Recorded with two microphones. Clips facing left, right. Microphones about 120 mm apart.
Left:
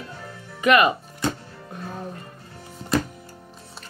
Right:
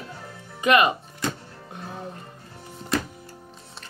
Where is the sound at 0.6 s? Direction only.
25° right (ahead or behind).